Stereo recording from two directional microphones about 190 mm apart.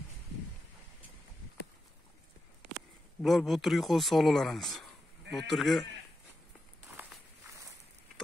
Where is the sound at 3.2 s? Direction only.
Centre (ahead or behind).